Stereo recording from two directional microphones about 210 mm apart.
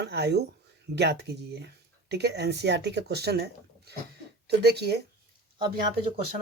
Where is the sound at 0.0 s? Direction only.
50° right (ahead or behind).